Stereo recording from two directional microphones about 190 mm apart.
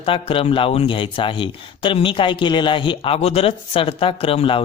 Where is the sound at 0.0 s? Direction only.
30° left (ahead or behind).